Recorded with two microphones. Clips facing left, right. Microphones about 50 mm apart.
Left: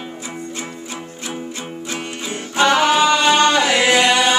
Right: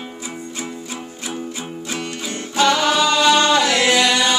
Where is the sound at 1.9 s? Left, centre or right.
Centre.